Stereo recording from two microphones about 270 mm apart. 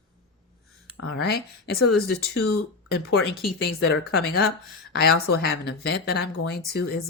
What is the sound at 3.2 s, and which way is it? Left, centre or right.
Speech, centre.